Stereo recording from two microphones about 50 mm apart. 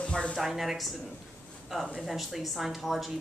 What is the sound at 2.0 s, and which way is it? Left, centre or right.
A woman's voice, centre.